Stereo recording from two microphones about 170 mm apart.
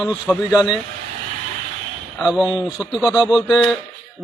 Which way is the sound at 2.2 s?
Centre (ahead or behind).